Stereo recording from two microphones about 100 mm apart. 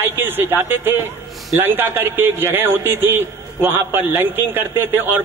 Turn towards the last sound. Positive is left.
turn(degrees=-20)  # may be behind; listen again after turning